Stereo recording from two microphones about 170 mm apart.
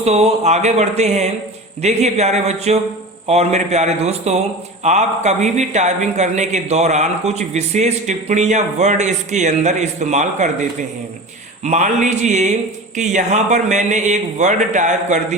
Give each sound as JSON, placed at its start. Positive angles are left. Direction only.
{"t": 0.0, "sound": "speech", "side_deg": -40}
{"t": 11.6, "sound": "speech", "side_deg": -45}